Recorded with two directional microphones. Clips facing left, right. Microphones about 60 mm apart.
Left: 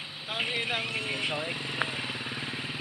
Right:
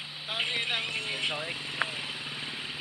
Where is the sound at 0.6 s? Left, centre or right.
Left.